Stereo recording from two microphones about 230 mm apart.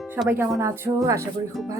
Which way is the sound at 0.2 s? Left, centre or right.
Centre.